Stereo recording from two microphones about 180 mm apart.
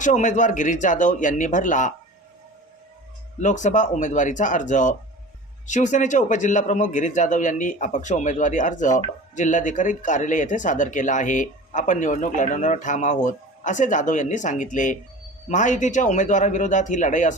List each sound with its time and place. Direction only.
0.0 s speech: 45° left (ahead or behind)
3.4 s speech: 45° left (ahead or behind)